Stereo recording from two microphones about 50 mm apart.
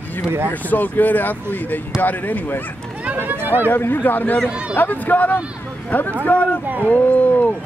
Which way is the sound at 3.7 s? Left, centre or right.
Left.